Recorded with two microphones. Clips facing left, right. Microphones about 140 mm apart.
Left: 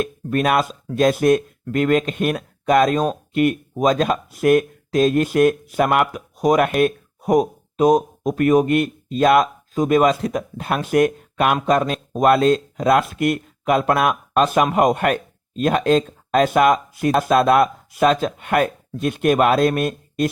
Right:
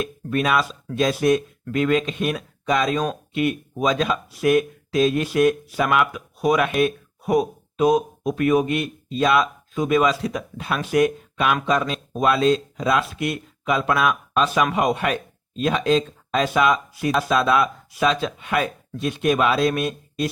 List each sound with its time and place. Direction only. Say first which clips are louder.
0.0 s speech: left 3 dB; 45° left (ahead or behind)